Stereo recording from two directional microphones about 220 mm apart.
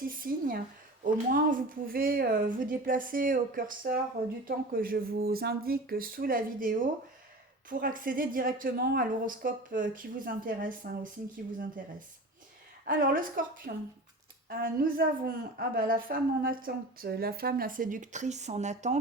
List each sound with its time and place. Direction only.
0.0 s a woman's voice: 40° right (ahead or behind)
12.8 s a woman's voice: 40° right (ahead or behind)